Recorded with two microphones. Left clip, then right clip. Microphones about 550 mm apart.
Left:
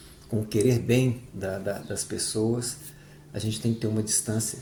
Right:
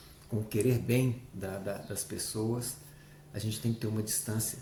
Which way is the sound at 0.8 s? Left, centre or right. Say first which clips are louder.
Left 7 dB; right.